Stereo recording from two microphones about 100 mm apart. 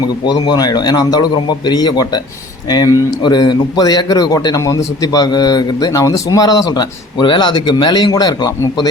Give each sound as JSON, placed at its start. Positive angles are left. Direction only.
{"t": 0.3, "sound": "a man's voice", "side_deg": 45}